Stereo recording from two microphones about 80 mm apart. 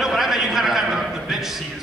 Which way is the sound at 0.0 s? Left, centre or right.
Centre.